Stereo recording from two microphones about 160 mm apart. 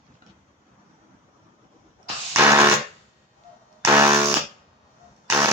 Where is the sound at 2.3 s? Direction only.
15° right (ahead or behind).